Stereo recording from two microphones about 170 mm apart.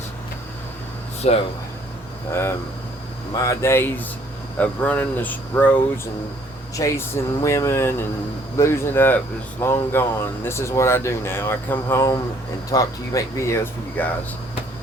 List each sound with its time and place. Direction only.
1.2 s speech: 40° left (ahead or behind)
2.3 s speech: 15° left (ahead or behind)